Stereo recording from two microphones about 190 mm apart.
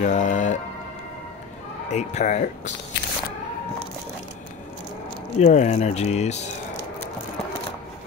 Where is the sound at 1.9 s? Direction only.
40° left (ahead or behind).